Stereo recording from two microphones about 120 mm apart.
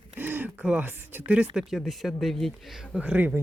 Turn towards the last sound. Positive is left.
turn(degrees=-15)  # may be behind; listen again after turning